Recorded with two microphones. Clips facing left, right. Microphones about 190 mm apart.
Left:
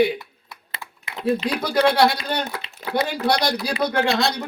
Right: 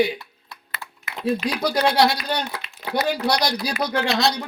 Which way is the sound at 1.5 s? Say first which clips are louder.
Left 3 dB; 55° left (ahead or behind).